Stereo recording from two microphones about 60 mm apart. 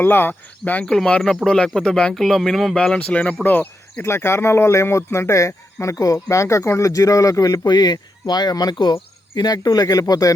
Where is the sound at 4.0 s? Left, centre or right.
Left.